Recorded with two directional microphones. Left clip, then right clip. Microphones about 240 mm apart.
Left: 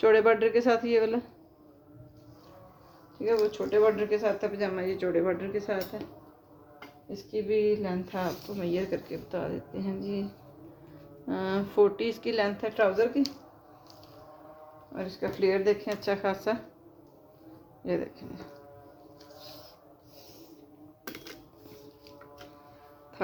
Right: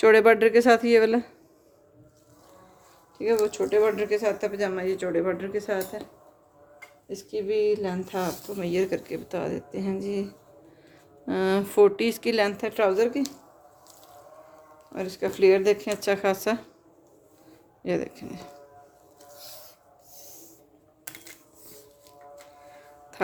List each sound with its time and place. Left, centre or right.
0.0 s speech: right
3.5 s speech: right
7.1 s speech: right
11.3 s speech: right
14.9 s speech: right
17.8 s speech: right